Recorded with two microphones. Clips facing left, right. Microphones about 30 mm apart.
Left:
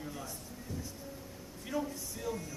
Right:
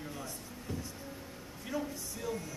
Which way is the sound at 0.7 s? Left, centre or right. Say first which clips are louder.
Right 2 dB; right.